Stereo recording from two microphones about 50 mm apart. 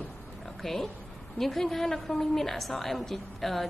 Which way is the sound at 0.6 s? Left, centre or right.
Centre.